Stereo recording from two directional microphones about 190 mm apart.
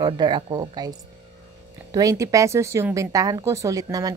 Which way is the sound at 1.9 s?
15° right (ahead or behind).